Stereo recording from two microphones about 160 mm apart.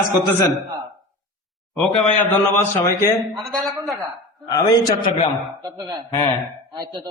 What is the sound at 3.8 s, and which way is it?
Speech, 20° right (ahead or behind).